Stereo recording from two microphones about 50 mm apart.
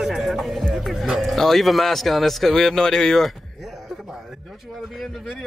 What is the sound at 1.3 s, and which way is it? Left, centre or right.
A man's voice, centre.